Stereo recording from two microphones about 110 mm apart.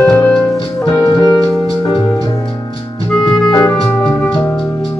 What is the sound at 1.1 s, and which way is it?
Keyboard, 40° left (ahead or behind).